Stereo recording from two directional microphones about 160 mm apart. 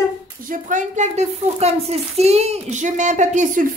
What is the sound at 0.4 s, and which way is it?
A woman's voice, 55° right (ahead or behind).